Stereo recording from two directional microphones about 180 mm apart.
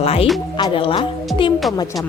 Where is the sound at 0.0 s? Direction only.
35° left (ahead or behind).